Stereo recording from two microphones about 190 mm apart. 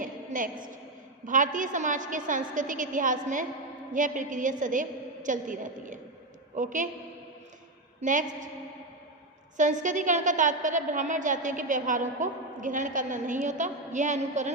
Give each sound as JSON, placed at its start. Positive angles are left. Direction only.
{"t": 0.0, "sound": "a sound", "side_deg": -45}
{"t": 1.2, "sound": "a woman's voice", "side_deg": -45}
{"t": 8.0, "sound": "a woman's voice", "side_deg": -40}
{"t": 9.6, "sound": "a woman's voice", "side_deg": -40}